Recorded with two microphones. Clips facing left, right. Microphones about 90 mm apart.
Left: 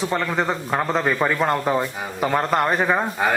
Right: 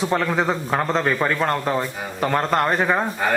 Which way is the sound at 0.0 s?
Centre (ahead or behind).